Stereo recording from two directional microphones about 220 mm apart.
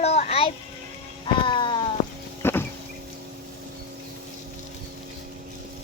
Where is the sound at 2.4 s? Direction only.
10° left (ahead or behind).